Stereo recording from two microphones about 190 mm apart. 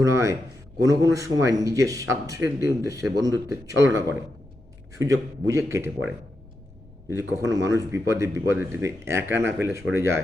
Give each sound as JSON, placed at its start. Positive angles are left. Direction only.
{"t": 0.0, "sound": "a man's voice", "side_deg": -15}
{"t": 7.1, "sound": "speech", "side_deg": -15}